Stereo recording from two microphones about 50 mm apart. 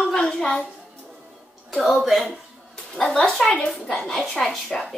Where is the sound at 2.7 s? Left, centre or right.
Centre.